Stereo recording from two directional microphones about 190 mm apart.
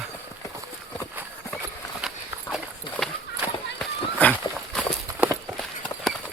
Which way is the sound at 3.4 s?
10° right (ahead or behind).